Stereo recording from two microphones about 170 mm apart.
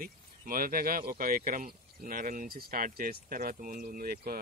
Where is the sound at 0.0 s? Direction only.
55° right (ahead or behind).